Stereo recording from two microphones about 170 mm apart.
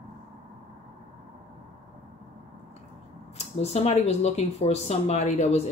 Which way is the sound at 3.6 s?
40° left (ahead or behind).